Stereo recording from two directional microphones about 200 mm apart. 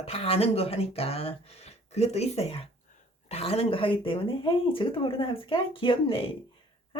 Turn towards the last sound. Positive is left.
turn(degrees=25)  # may be behind; listen again after turning